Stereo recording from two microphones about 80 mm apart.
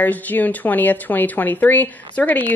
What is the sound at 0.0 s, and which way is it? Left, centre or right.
Speech, left.